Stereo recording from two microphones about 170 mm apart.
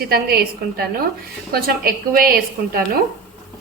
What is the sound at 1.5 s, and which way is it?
A woman's voice, 60° right (ahead or behind).